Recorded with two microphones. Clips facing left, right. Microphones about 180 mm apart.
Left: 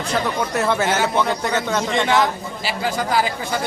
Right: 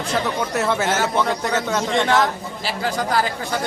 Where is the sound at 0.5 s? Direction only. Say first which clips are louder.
Left 1 dB; centre (ahead or behind).